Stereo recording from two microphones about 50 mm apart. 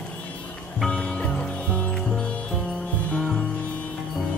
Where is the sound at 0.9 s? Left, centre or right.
Left.